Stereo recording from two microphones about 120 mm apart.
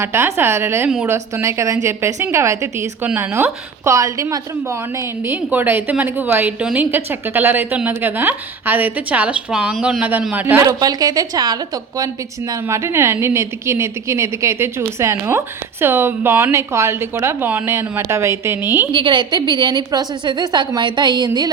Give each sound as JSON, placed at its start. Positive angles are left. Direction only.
{"t": 0.0, "sound": "a woman's voice", "side_deg": -20}
{"t": 10.0, "sound": "a woman's voice", "side_deg": -15}
{"t": 10.8, "sound": "a woman's voice", "side_deg": -30}
{"t": 18.9, "sound": "a woman's voice", "side_deg": -40}